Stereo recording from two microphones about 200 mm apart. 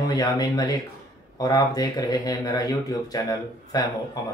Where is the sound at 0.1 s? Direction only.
20° left (ahead or behind).